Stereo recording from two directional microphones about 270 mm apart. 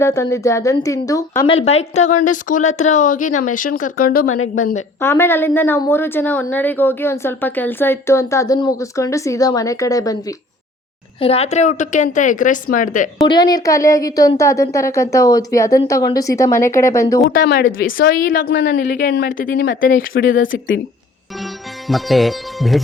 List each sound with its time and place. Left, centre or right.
0.0 s a woman's voice: centre
1.5 s speech: left
4.9 s a woman's voice: centre; by 13.1 s left
13.2 s a woman's voice: centre
17.2 s speech: left
17.9 s speech: left
20.5 s speech: left
21.8 s speech: centre